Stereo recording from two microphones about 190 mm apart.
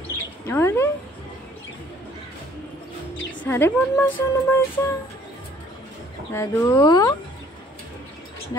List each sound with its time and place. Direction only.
0.5 s speech: 15° left (ahead or behind)
3.4 s speech: 10° left (ahead or behind)
6.3 s speech: 15° left (ahead or behind)